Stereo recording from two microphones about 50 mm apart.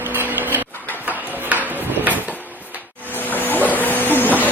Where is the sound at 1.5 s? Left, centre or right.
Right.